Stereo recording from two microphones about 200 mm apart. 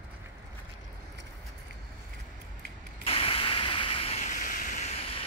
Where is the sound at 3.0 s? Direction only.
30° left (ahead or behind).